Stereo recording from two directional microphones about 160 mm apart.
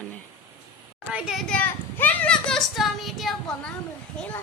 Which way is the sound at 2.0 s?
10° left (ahead or behind).